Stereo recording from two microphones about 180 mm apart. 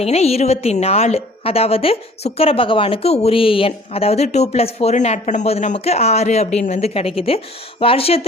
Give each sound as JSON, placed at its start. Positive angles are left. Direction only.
{"t": 0.0, "sound": "a woman's voice", "side_deg": 35}